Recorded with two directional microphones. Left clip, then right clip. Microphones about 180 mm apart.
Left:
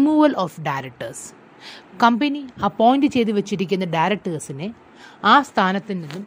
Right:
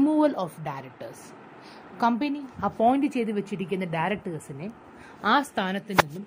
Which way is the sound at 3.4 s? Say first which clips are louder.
Left 8 dB; 75° left (ahead or behind).